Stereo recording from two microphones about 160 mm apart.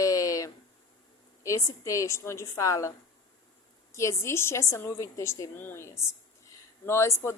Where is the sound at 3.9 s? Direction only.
20° left (ahead or behind).